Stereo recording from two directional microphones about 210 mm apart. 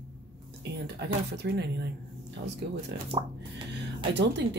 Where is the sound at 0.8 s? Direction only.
50° right (ahead or behind).